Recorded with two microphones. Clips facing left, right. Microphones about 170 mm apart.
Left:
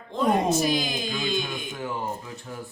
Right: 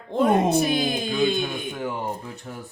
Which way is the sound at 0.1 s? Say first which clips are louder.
Right 3 dB; 55° right (ahead or behind).